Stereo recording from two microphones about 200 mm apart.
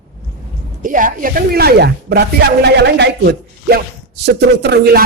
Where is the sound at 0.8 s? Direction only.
40° right (ahead or behind).